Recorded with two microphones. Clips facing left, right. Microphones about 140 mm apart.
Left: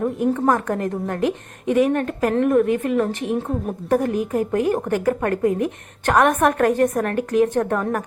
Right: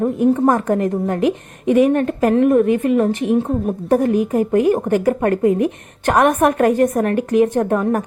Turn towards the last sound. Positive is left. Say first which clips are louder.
# right 3 dB
turn(degrees=-15)  # may be behind; listen again after turning